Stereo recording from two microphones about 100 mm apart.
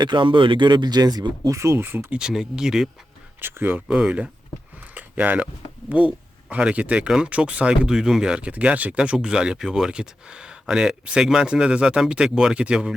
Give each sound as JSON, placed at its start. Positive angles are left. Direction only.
{"t": 0.0, "sound": "speech", "side_deg": -50}
{"t": 1.5, "sound": "speech", "side_deg": -30}
{"t": 2.1, "sound": "speech", "side_deg": -5}
{"t": 3.4, "sound": "speech", "side_deg": -20}
{"t": 3.8, "sound": "speech", "side_deg": -10}
{"t": 4.9, "sound": "a sound", "side_deg": -15}
{"t": 5.9, "sound": "speech", "side_deg": -15}